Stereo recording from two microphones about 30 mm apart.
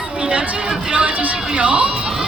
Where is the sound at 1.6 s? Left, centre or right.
Right.